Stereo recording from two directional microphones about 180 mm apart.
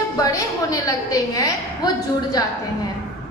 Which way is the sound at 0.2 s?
20° left (ahead or behind).